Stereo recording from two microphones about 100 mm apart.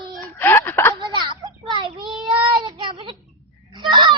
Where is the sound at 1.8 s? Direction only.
55° right (ahead or behind).